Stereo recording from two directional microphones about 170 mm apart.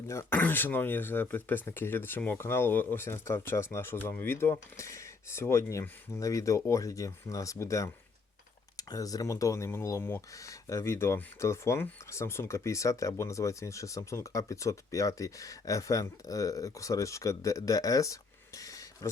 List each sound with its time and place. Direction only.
0.1 s speech: 15° left (ahead or behind)